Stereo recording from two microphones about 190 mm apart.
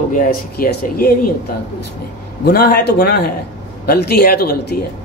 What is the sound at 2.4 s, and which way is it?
A woman's voice, 55° left (ahead or behind).